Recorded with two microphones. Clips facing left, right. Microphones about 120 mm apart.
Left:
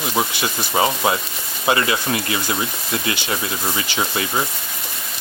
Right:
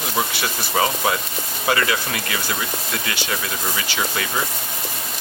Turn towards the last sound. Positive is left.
turn(degrees=25)  # may be behind; listen again after turning